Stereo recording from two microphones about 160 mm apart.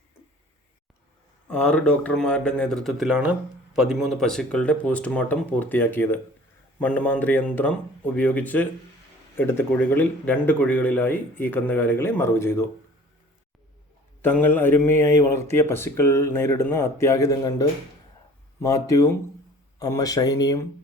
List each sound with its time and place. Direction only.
1.5 s speech: 5° left (ahead or behind)
14.2 s speech: 10° left (ahead or behind)